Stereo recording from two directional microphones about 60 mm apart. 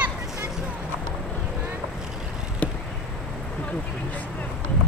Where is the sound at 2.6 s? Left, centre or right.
Left.